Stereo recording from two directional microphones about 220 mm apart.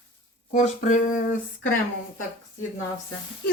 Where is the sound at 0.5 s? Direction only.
35° left (ahead or behind).